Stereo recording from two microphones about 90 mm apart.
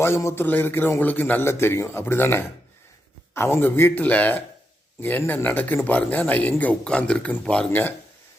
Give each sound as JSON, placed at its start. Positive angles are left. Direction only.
{"t": 0.0, "sound": "a man's voice", "side_deg": 30}